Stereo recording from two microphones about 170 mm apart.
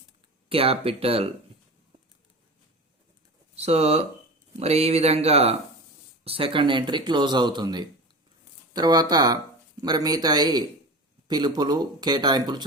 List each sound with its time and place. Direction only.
0.4 s speech: 35° right (ahead or behind)
3.5 s speech: 40° right (ahead or behind)